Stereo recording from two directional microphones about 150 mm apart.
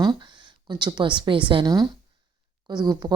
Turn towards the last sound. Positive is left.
turn(degrees=-25)  # may be behind; listen again after turning